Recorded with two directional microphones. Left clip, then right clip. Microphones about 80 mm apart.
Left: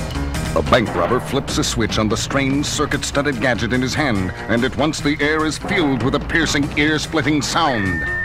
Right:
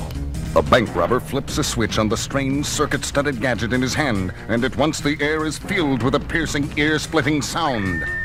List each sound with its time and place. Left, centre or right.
0.5 s speech: centre